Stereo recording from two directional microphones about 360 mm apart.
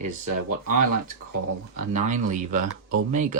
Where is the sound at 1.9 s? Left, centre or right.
Right.